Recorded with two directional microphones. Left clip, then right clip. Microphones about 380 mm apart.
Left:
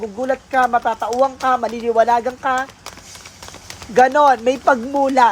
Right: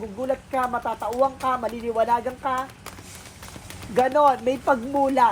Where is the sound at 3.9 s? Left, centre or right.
Left.